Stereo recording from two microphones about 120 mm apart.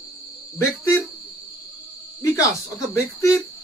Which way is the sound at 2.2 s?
25° left (ahead or behind).